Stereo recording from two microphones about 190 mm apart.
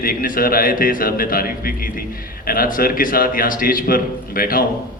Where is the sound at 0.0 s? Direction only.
50° left (ahead or behind).